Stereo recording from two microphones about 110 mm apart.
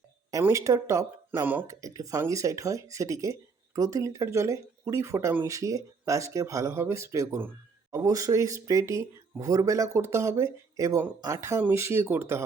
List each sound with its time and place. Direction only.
0.4 s speech: 30° right (ahead or behind)